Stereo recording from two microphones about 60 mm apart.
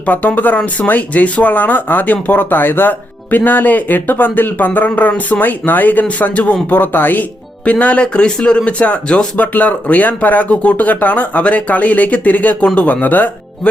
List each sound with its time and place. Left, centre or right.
0.0 s speech: left